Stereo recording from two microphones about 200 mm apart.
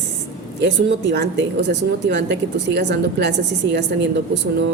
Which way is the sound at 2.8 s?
60° right (ahead or behind).